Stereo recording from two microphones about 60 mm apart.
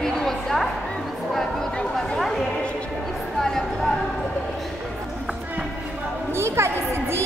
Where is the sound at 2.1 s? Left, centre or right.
Centre.